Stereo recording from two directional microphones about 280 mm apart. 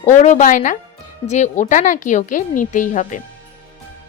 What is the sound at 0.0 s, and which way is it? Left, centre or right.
A woman's voice, left.